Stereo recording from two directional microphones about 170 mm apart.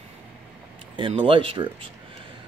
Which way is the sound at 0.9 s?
30° right (ahead or behind).